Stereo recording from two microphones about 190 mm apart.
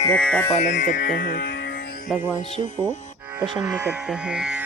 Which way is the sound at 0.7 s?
70° left (ahead or behind).